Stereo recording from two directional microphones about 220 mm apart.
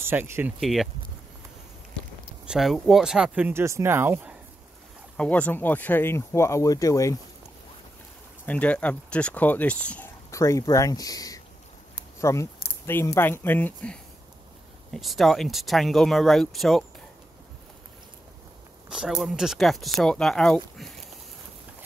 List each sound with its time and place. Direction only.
0.0 s speech: 10° right (ahead or behind)
2.4 s speech: centre (ahead or behind)
5.1 s speech: 5° left (ahead or behind)
8.5 s speech: 5° left (ahead or behind)
18.9 s speech: 5° right (ahead or behind)